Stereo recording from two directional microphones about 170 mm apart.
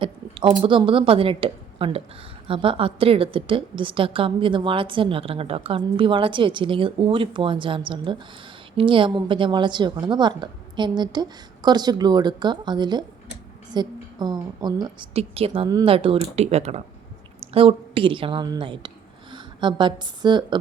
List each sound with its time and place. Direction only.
0.0 s a woman's voice: 30° right (ahead or behind)